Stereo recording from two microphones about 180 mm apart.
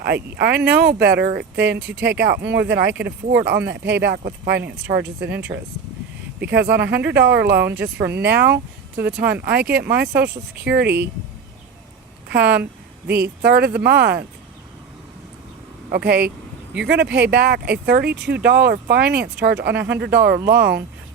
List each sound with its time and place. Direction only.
0.0 s speech: 60° right (ahead or behind)
7.8 s speech: 10° right (ahead or behind)
8.1 s speech: 65° right (ahead or behind)
12.3 s speech: 65° right (ahead or behind)
15.9 s speech: 60° right (ahead or behind)